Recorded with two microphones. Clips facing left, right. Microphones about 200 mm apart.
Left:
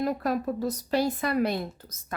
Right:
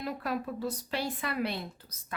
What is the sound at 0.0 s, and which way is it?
A woman's voice, 45° left (ahead or behind).